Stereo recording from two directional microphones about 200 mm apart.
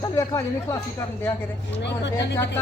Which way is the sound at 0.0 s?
15° left (ahead or behind).